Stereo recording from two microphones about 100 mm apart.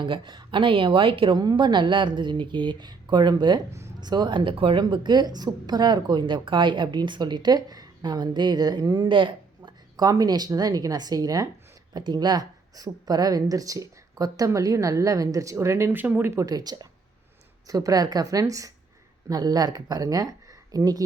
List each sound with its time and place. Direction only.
0.0 s speech: 55° right (ahead or behind)
1.4 s a woman's voice: 45° right (ahead or behind); by 4.8 s 65° right (ahead or behind)
4.8 s a woman's voice: 45° right (ahead or behind); by 16.3 s 20° right (ahead or behind)
16.3 s speech: 35° right (ahead or behind)